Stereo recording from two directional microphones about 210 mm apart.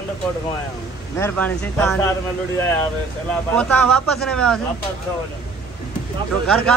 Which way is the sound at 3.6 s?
5° left (ahead or behind).